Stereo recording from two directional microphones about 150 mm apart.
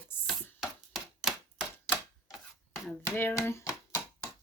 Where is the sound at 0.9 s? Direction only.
Centre (ahead or behind).